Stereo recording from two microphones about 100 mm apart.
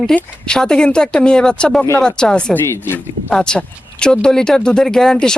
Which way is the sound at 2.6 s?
25° left (ahead or behind).